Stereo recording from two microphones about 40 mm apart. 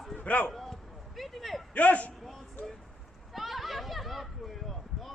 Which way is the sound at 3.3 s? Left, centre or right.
Centre.